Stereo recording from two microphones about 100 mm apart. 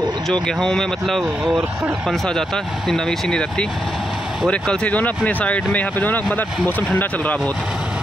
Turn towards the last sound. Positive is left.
turn(degrees=15)  # may be behind; listen again after turning